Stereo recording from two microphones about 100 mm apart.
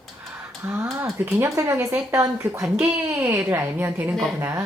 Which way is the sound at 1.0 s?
25° right (ahead or behind).